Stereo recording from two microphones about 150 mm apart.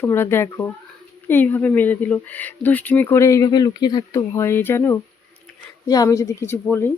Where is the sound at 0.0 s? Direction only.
15° left (ahead or behind).